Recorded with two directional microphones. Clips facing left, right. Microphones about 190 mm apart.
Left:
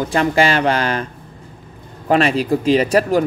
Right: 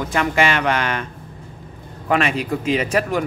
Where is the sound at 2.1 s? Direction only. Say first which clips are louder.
Left 5 dB; 35° left (ahead or behind).